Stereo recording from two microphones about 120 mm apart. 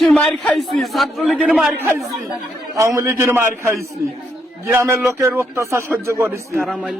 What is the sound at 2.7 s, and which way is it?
Speech, 25° right (ahead or behind).